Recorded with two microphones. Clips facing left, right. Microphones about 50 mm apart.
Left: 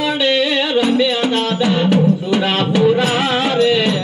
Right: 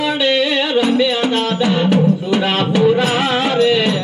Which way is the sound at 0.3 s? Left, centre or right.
Right.